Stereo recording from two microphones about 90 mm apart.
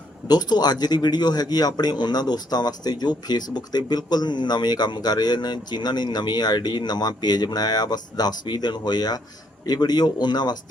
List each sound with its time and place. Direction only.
0.3 s speech: 50° left (ahead or behind)